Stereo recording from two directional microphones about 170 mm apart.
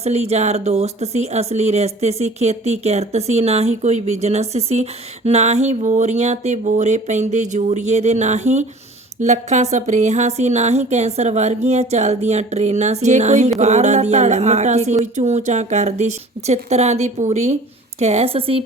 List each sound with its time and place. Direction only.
0.0 s speech: 40° right (ahead or behind)